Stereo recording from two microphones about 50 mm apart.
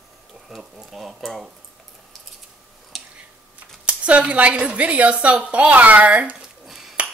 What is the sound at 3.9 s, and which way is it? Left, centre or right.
A woman's voice, right.